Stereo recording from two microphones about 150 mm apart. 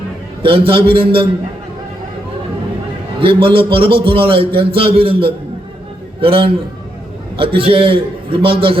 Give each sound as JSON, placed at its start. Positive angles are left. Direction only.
{"t": 0.4, "sound": "a man's voice", "side_deg": -35}
{"t": 3.2, "sound": "a man's voice", "side_deg": -35}